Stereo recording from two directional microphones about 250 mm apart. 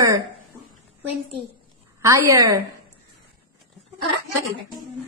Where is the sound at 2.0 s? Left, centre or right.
Centre.